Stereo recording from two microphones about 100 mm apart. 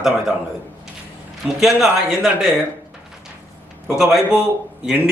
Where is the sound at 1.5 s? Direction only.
5° right (ahead or behind).